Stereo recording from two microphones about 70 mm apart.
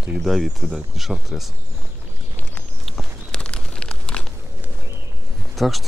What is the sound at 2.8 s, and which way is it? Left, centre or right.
Walk, centre.